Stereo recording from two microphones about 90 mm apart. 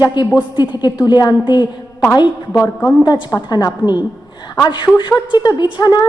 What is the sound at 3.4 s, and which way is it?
A woman's voice, 50° left (ahead or behind).